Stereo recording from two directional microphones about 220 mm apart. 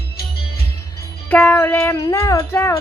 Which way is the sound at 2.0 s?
15° left (ahead or behind).